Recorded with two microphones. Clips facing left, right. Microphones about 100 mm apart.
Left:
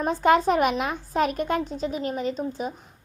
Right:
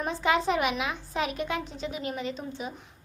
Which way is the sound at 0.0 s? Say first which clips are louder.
Left 6 dB; 50° left (ahead or behind).